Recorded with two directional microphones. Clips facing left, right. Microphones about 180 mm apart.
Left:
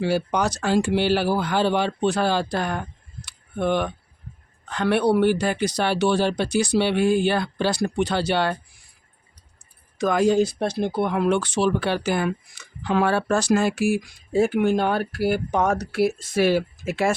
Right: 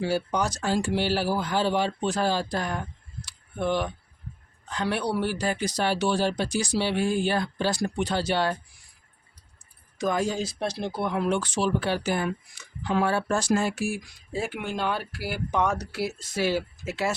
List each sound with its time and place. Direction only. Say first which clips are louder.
0.0 s speech: left 4 dB; 70° left (ahead or behind)
10.0 s speech: left 7 dB; 70° left (ahead or behind)
14.3 s speech: left 11 dB; 50° left (ahead or behind)